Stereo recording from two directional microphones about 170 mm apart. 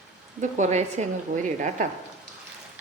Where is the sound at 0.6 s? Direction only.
40° right (ahead or behind).